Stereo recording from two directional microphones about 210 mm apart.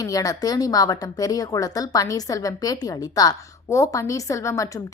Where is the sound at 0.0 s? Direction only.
15° left (ahead or behind).